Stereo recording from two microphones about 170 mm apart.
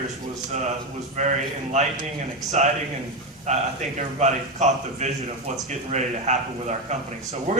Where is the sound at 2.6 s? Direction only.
45° right (ahead or behind).